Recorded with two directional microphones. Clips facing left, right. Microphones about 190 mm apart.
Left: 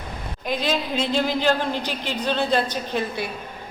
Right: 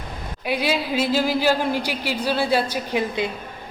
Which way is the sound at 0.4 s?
10° right (ahead or behind).